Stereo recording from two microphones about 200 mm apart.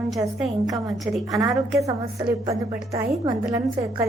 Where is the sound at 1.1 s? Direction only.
Centre (ahead or behind).